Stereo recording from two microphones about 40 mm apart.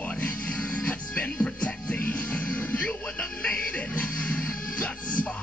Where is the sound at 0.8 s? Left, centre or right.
Left.